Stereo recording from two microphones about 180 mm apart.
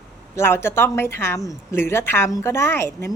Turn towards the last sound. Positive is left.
turn(degrees=15)  # may be behind; listen again after turning